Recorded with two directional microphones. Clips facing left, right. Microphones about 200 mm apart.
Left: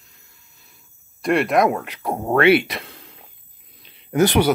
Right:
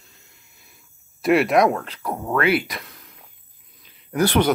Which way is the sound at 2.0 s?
25° left (ahead or behind).